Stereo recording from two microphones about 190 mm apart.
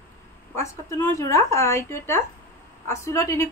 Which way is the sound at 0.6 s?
15° left (ahead or behind).